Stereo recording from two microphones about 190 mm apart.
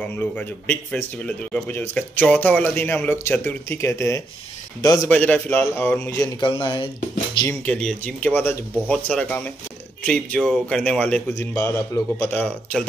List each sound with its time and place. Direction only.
0.0 s speech: 10° left (ahead or behind); by 6.9 s 25° left (ahead or behind)
7.6 s speech: 5° left (ahead or behind)